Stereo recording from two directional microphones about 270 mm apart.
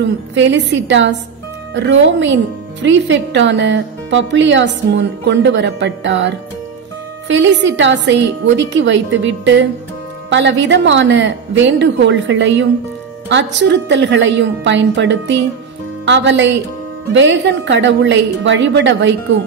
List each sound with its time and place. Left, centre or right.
0.4 s a woman's voice: right